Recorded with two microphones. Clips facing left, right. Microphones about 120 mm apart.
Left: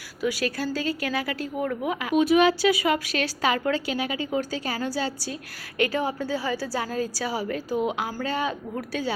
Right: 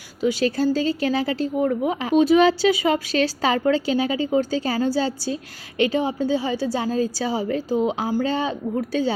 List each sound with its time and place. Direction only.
0.2 s a woman's voice: 25° right (ahead or behind)